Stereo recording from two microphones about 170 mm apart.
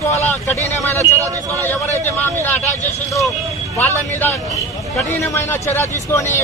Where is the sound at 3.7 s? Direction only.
10° left (ahead or behind).